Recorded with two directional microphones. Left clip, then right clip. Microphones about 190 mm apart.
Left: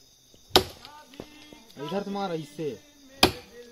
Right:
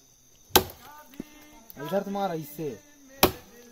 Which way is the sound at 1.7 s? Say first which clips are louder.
Right 3 dB; 20° right (ahead or behind).